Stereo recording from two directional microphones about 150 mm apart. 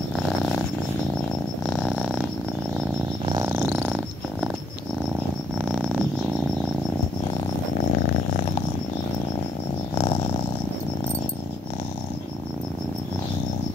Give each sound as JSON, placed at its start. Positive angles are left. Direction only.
{"t": 0.1, "sound": "purr", "side_deg": 5}
{"t": 1.9, "sound": "purr", "side_deg": 0}
{"t": 3.3, "sound": "purr", "side_deg": -20}
{"t": 5.6, "sound": "cricket", "side_deg": 5}